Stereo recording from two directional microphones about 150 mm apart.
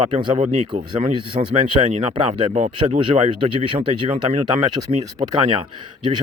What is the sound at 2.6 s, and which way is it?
Speech, 55° right (ahead or behind).